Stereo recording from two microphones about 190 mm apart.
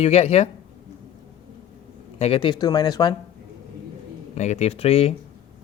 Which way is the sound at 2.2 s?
30° left (ahead or behind).